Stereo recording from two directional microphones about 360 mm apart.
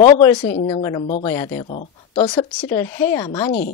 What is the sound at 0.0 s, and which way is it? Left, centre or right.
Speech, centre.